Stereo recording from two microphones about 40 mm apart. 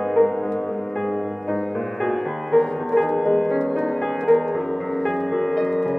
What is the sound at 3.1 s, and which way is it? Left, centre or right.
Music, centre.